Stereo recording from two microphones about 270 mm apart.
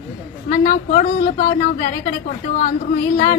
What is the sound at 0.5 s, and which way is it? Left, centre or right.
A woman's voice, left.